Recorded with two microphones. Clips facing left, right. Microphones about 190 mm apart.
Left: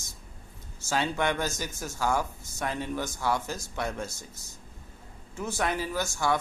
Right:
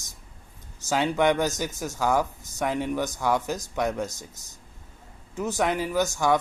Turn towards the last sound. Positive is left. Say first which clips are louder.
# right 5 dB
turn(degrees=-15)  # may be behind; listen again after turning